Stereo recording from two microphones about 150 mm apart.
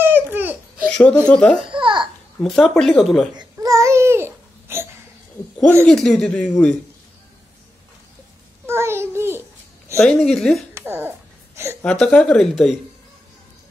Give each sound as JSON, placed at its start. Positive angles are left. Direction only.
{"t": 0.0, "sound": "a sound", "side_deg": -10}
{"t": 0.8, "sound": "a sound", "side_deg": 5}
{"t": 1.2, "sound": "speech", "side_deg": 5}
{"t": 1.8, "sound": "babbling", "side_deg": -35}
{"t": 2.4, "sound": "speech", "side_deg": 5}
{"t": 3.5, "sound": "babbling", "side_deg": -20}
{"t": 5.9, "sound": "speech", "side_deg": 5}
{"t": 8.6, "sound": "a sound", "side_deg": -15}
{"t": 9.9, "sound": "speech", "side_deg": 5}
{"t": 10.7, "sound": "babbling", "side_deg": -15}
{"t": 11.8, "sound": "speech", "side_deg": 5}